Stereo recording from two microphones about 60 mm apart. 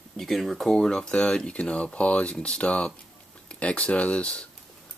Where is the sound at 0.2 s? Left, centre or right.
Centre.